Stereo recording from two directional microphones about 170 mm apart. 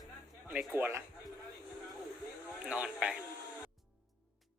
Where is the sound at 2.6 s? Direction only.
5° right (ahead or behind).